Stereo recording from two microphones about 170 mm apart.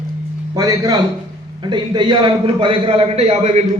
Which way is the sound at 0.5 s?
20° right (ahead or behind).